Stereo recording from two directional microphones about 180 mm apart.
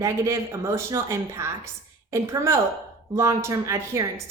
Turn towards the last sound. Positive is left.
turn(degrees=-15)  # may be behind; listen again after turning